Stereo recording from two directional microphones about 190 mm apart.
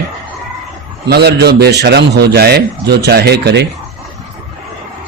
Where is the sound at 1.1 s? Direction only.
60° right (ahead or behind).